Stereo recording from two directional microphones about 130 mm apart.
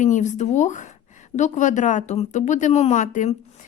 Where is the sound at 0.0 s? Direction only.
70° left (ahead or behind).